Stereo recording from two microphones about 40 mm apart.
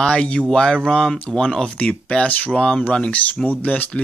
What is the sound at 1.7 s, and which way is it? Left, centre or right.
Speech, left.